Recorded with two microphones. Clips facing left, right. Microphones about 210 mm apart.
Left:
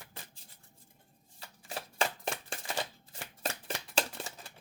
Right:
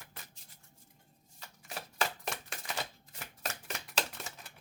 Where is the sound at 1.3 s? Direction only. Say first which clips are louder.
Left 3 dB; 30° left (ahead or behind).